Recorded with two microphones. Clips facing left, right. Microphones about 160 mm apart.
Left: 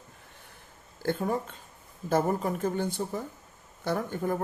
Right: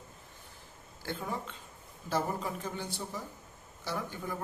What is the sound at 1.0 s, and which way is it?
Speech, 45° left (ahead or behind).